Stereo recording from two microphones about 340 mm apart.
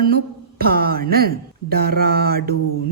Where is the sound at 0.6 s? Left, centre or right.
Right.